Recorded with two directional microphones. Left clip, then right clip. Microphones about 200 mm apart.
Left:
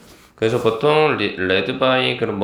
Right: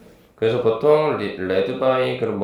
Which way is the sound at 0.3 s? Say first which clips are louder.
Left 1 dB; 30° left (ahead or behind).